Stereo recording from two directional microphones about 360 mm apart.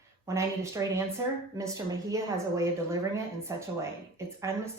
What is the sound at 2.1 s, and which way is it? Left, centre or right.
A woman's voice, centre.